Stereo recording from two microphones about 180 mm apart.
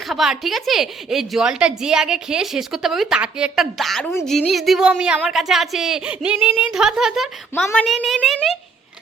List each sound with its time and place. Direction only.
0.1 s a woman's voice: centre (ahead or behind)